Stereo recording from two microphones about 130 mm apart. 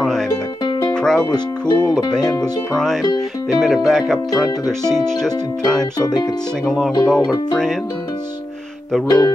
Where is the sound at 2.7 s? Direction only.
Centre (ahead or behind).